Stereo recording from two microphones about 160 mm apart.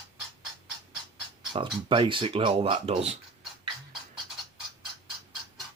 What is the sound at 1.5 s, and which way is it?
Speech, 35° right (ahead or behind).